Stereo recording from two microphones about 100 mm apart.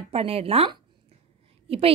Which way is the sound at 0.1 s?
85° right.